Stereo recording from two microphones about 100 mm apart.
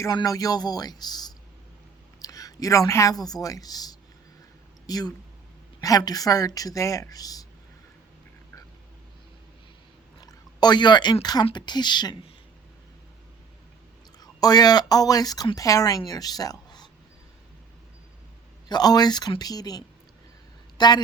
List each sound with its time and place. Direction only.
0.2 s speech: 35° left (ahead or behind)
10.2 s a woman's voice: 45° left (ahead or behind)
14.2 s a woman's voice: 40° left (ahead or behind)
18.7 s a woman's voice: 40° left (ahead or behind)